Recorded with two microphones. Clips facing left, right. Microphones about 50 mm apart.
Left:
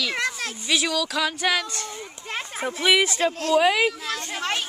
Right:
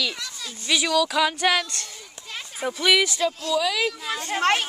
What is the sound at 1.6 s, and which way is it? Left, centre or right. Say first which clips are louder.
Speech: left 3 dB; left.